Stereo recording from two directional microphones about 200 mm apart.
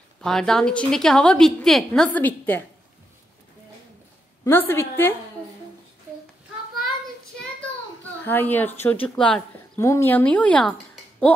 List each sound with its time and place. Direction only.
0.2 s a woman's voice: centre (ahead or behind)
4.5 s speech: 10° left (ahead or behind)
8.0 s a woman's voice: 10° left (ahead or behind)